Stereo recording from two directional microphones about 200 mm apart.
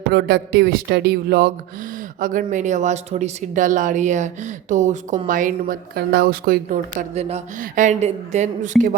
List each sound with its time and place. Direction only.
0.1 s speech: 55° right (ahead or behind)
7.1 s speech: 30° right (ahead or behind)